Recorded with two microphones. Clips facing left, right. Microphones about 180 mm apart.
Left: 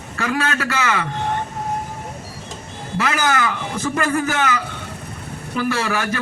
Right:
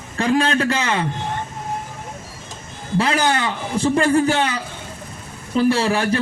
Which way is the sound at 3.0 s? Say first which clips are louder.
Right 1 dB; 30° right (ahead or behind).